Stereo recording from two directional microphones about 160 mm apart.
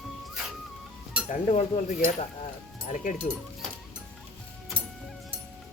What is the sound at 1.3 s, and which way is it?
Speech, 45° left (ahead or behind).